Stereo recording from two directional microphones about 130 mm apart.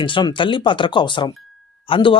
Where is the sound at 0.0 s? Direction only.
40° left (ahead or behind).